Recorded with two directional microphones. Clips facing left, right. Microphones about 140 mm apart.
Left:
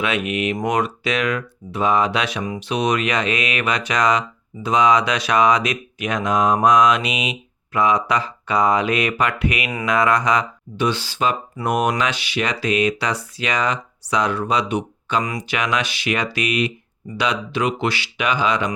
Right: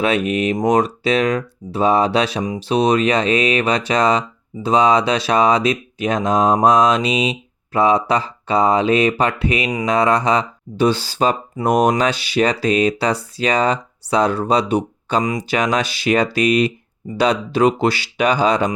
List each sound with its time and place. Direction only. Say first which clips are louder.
0.0 s speech: right 4 dB; 35° right (ahead or behind)